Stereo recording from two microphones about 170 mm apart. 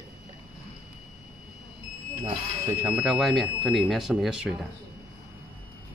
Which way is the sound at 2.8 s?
5° right (ahead or behind).